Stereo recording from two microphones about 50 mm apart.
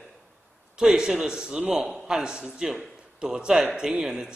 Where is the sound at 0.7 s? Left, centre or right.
Centre.